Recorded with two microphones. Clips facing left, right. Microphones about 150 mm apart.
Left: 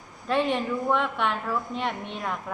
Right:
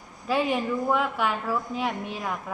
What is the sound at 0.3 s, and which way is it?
A woman's voice, 5° right (ahead or behind).